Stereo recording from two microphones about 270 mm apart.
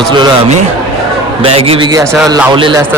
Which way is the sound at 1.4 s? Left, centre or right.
Centre.